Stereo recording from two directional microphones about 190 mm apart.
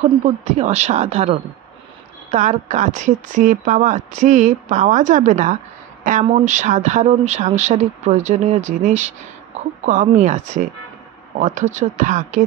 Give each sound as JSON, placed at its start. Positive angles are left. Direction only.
{"t": 0.0, "sound": "speech", "side_deg": -35}